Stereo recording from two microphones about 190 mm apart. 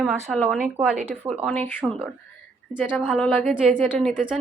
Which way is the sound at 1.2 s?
15° right (ahead or behind).